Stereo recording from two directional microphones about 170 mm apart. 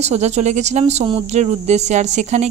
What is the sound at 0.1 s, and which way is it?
Speech, 40° right (ahead or behind).